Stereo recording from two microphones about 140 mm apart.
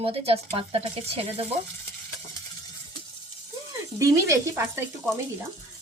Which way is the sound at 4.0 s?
20° right (ahead or behind).